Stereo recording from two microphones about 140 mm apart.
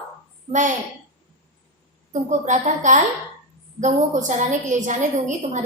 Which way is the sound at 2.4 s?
60° right (ahead or behind).